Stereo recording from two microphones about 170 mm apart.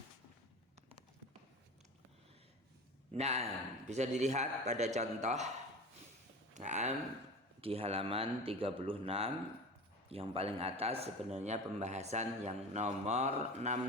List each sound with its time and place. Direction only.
3.1 s a man's voice: 40° right (ahead or behind)
6.5 s a man's voice: 45° right (ahead or behind)